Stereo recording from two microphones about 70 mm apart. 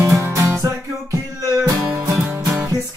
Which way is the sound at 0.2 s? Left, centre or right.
Right.